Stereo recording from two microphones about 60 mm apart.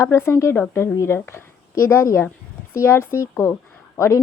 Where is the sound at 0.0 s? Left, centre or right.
Left.